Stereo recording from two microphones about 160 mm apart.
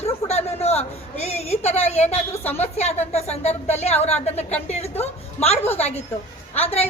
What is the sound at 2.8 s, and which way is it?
A woman's voice, 40° left (ahead or behind).